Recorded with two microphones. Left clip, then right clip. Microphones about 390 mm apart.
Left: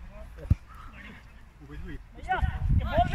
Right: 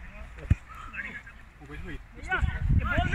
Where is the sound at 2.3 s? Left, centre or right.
Left.